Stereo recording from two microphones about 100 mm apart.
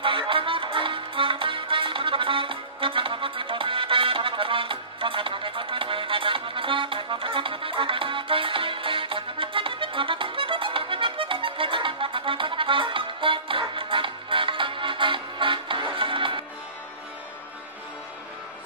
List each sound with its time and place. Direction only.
0.0 s music: 60° right (ahead or behind)